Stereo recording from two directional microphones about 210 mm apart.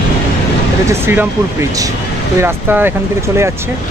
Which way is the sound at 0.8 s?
10° right (ahead or behind).